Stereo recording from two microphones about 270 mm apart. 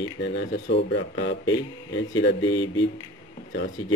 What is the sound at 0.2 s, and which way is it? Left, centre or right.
Speech, left.